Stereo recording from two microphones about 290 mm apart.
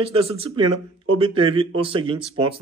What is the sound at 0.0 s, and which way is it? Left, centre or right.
Speech, centre.